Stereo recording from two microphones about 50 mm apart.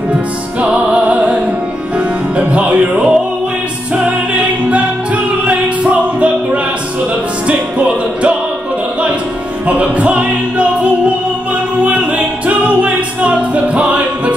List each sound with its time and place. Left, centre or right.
0.6 s music: right
9.7 s music: right